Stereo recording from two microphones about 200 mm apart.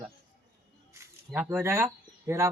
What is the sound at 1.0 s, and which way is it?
Speech, 10° right (ahead or behind).